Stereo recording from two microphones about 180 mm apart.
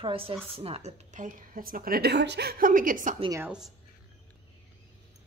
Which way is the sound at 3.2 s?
20° right (ahead or behind).